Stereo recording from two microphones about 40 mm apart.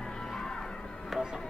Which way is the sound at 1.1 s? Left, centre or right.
Centre.